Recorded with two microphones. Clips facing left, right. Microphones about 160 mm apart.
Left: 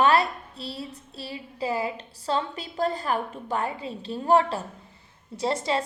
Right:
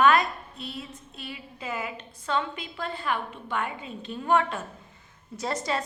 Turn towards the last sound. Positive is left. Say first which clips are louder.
# left 3 dB
turn(degrees=25)  # may be behind; listen again after turning